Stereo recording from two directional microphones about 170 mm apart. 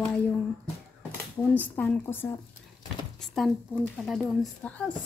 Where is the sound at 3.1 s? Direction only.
Centre (ahead or behind).